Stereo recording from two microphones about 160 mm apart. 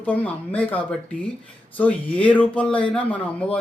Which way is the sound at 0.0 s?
10° left (ahead or behind).